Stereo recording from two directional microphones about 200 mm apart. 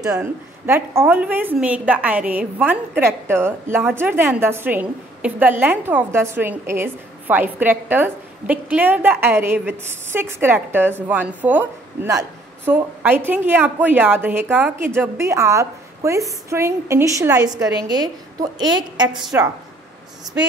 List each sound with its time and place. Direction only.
0.1 s a woman's voice: 10° right (ahead or behind)